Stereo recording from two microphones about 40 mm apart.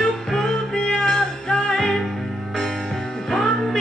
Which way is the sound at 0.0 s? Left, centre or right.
Centre.